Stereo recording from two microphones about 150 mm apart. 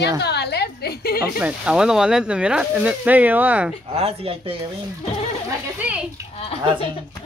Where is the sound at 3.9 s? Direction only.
40° right (ahead or behind).